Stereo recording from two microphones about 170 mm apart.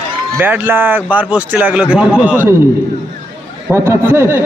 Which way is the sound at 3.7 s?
15° right (ahead or behind).